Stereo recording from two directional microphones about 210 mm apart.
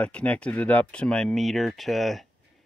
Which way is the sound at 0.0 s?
5° left (ahead or behind).